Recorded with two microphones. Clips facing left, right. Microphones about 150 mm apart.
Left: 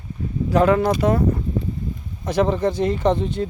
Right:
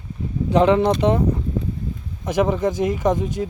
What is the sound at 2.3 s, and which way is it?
Speech, 10° right (ahead or behind).